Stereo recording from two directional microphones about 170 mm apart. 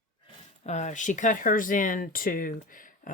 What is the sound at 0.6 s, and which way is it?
Speech, 45° left (ahead or behind).